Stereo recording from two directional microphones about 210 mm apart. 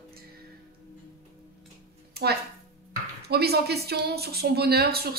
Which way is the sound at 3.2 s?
50° right (ahead or behind).